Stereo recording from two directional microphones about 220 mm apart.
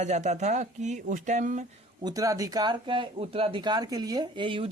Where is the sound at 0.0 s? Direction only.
30° right (ahead or behind).